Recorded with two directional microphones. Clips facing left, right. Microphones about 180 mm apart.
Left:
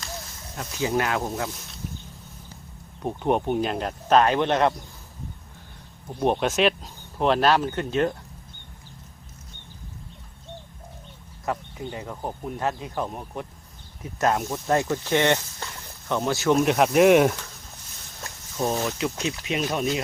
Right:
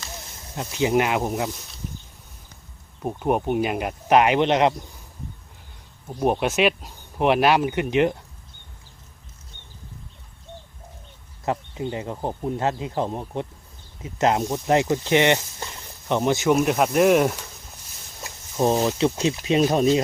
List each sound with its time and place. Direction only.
0.3 s speech: 20° right (ahead or behind)
3.0 s speech: 5° right (ahead or behind)
6.1 s speech: 10° right (ahead or behind)
11.4 s speech: 20° right (ahead or behind)
16.6 s speech: centre (ahead or behind)
18.5 s speech: 20° right (ahead or behind)